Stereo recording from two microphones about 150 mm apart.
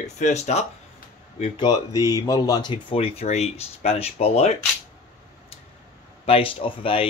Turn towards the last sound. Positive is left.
turn(degrees=35)  # may be behind; listen again after turning